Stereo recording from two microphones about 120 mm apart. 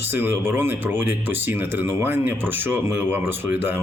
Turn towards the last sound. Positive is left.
turn(degrees=-20)  # may be behind; listen again after turning